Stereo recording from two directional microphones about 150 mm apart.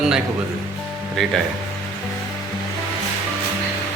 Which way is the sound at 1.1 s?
Centre (ahead or behind).